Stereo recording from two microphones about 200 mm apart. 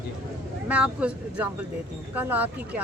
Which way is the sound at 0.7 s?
5° right (ahead or behind).